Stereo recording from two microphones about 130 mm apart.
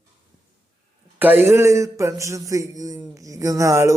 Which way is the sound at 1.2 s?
15° right (ahead or behind).